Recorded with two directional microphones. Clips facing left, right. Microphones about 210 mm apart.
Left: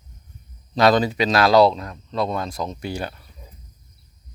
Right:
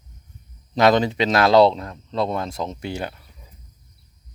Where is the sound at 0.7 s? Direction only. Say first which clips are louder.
Even; 20° right (ahead or behind).